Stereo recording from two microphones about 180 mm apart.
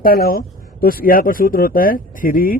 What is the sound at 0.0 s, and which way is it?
Speech, 55° left (ahead or behind).